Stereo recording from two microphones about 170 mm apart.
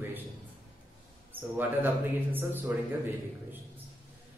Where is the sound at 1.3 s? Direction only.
10° right (ahead or behind).